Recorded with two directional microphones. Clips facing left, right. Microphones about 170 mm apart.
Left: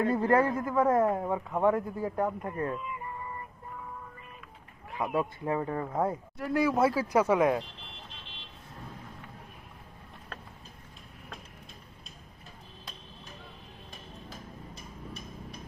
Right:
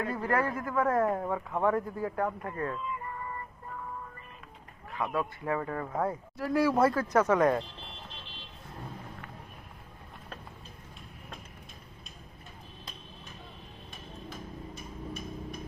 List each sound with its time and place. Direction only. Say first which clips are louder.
0.0 s speech: left 5 dB; 25° left (ahead or behind)
5.1 s speech: left 2 dB; 20° left (ahead or behind)
6.3 s speech: right 2 dB; centre (ahead or behind)